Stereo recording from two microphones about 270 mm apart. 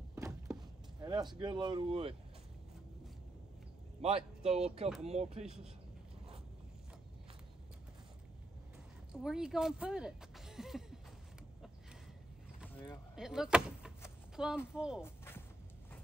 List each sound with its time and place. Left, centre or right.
0.1 s a sound: centre
1.0 s speech: centre
4.0 s speech: right
9.1 s speech: centre
12.6 s boat: centre
13.1 s speech: centre
14.3 s a sound: centre
14.8 s speech: centre
15.0 s a sound: centre